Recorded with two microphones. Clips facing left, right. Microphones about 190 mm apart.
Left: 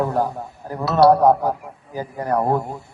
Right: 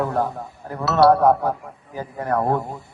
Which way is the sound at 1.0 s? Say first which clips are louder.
Left 1 dB; 20° left (ahead or behind).